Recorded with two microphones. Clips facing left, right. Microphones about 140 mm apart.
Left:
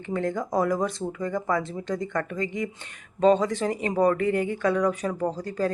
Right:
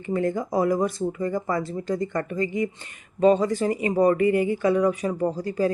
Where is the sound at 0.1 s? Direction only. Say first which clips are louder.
Right 2 dB; 5° right (ahead or behind).